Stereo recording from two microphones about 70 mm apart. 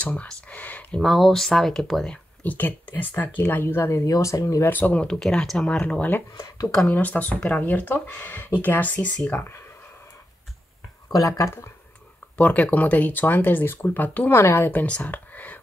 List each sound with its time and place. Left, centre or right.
0.0 s speech: centre
1.0 s speech: centre
2.0 s speech: left
4.0 s speech: left
4.6 s speech: left
5.0 s speech: centre
5.8 s speech: centre
6.3 s speech: left
6.9 s speech: left
11.1 s speech: left
12.4 s speech: left
14.3 s speech: left
14.9 s a sound: left